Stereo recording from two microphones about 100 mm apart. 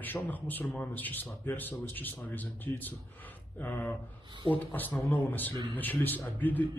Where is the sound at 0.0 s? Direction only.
20° left (ahead or behind).